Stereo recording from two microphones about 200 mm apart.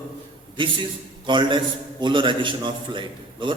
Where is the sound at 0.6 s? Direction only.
25° right (ahead or behind).